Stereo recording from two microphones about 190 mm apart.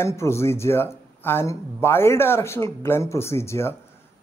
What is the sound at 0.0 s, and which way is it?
Speech, 15° left (ahead or behind).